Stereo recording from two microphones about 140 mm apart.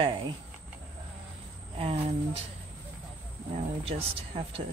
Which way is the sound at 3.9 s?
50° right (ahead or behind).